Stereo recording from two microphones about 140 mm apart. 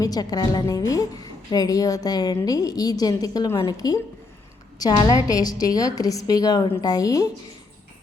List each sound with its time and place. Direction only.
0.0 s a woman's voice: 25° left (ahead or behind)